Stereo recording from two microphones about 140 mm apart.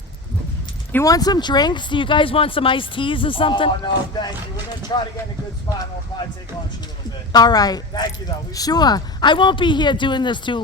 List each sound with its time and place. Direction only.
0.9 s speech: 25° left (ahead or behind)
7.3 s speech: 30° left (ahead or behind)